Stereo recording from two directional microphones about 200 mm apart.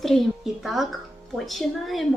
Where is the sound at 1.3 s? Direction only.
Centre (ahead or behind).